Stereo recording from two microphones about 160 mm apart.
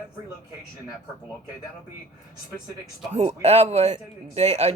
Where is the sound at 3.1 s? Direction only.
45° right (ahead or behind).